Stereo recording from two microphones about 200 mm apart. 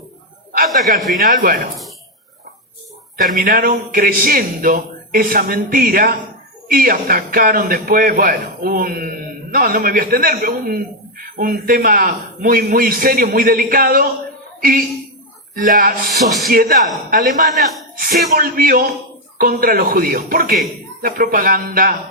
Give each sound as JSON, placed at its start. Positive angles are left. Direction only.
{"t": 1.2, "sound": "a man's voice", "side_deg": -50}
{"t": 3.3, "sound": "a man's voice", "side_deg": -45}
{"t": 16.2, "sound": "speech", "side_deg": 0}
{"t": 16.5, "sound": "a man's voice", "side_deg": -45}